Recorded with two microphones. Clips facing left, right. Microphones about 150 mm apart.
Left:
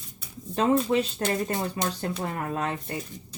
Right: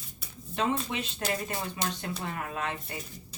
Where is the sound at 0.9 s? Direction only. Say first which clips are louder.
Left 8 dB; 35° left (ahead or behind).